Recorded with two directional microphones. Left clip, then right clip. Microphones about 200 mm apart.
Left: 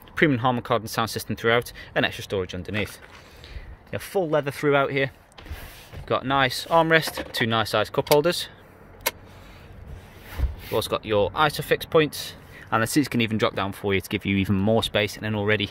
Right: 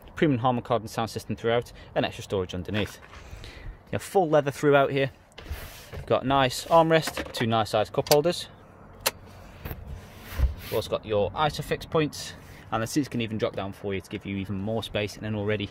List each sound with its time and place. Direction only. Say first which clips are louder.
0.1 s speech: left 3 dB; 5° right (ahead or behind)
10.7 s speech: left 3 dB; 5° left (ahead or behind)
14.8 s speech: left 7 dB; centre (ahead or behind)